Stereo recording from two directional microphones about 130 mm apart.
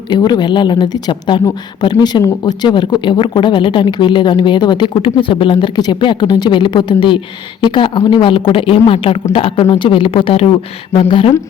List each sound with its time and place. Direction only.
0.1 s speech: 35° left (ahead or behind)